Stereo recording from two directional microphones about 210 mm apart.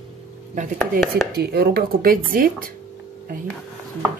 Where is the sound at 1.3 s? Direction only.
50° right (ahead or behind).